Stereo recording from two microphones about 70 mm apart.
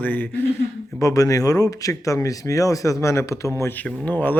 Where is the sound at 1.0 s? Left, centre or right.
Left.